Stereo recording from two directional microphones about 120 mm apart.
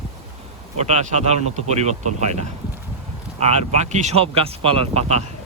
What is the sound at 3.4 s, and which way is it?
Speech, 65° right (ahead or behind).